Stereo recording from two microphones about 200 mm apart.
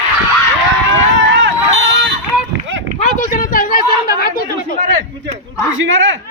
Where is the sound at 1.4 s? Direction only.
65° right (ahead or behind).